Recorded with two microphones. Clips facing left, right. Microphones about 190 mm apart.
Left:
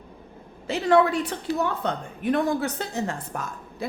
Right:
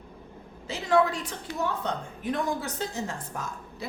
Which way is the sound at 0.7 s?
65° left (ahead or behind).